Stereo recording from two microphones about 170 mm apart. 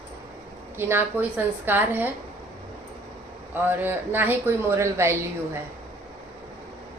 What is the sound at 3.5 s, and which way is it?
Speech, 10° right (ahead or behind).